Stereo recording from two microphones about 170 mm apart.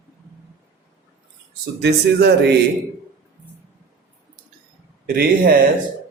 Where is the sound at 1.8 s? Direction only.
75° right (ahead or behind).